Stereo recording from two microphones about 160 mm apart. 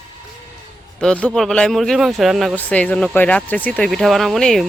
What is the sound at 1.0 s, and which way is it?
Speech, 5° left (ahead or behind).